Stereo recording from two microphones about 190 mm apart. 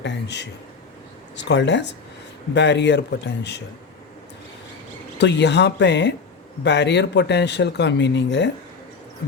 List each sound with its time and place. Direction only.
0.0 s a sound: 65° left (ahead or behind)
1.4 s speech: 65° left (ahead or behind)
5.2 s speech: 65° left (ahead or behind)